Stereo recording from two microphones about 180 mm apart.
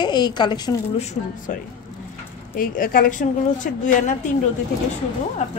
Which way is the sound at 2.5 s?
50° left (ahead or behind).